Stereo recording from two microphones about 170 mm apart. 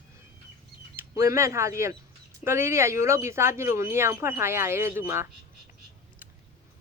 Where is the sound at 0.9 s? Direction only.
15° right (ahead or behind).